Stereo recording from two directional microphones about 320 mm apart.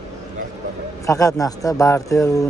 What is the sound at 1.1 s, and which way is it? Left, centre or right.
Speech, centre.